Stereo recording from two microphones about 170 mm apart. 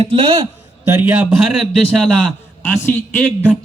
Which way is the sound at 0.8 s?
15° right (ahead or behind).